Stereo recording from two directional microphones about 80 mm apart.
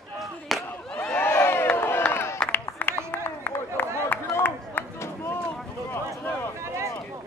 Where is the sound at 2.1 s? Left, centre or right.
Left.